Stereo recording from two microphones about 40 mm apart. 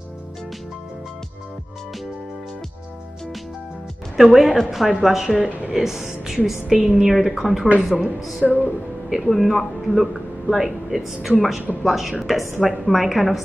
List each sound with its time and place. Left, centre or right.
4.2 s a woman's voice: centre
8.5 s music: left
9.1 s speech: centre